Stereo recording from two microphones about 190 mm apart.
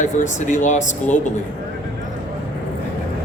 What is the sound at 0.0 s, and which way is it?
Speech, 40° left (ahead or behind).